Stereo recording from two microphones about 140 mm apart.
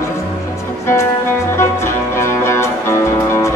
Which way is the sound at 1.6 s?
20° left (ahead or behind).